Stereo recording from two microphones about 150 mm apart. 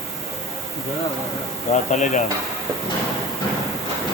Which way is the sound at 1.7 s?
55° left (ahead or behind).